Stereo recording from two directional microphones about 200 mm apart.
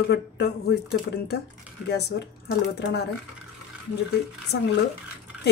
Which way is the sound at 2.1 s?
60° left (ahead or behind).